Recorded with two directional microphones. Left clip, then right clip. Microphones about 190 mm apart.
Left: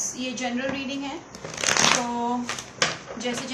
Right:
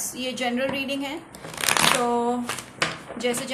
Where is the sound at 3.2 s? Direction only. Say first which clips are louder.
Right 4 dB; 55° right (ahead or behind).